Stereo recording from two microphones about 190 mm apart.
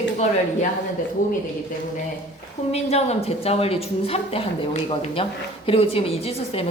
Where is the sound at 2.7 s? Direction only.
35° left (ahead or behind).